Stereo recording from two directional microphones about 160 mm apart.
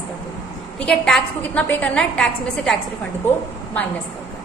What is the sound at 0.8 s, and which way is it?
A woman's voice, centre (ahead or behind).